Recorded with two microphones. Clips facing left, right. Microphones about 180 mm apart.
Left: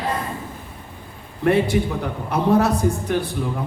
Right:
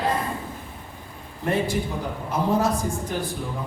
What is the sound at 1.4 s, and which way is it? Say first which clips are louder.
Speech: left 6 dB; 65° left (ahead or behind).